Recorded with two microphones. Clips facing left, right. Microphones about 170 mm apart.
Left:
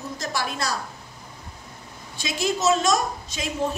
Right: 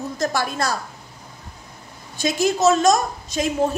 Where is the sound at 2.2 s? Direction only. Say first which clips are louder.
Right 6 dB; 45° right (ahead or behind).